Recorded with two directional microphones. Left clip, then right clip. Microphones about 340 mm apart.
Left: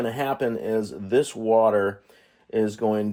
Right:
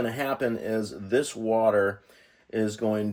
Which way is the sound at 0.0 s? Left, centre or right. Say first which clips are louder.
Left 2 dB; centre.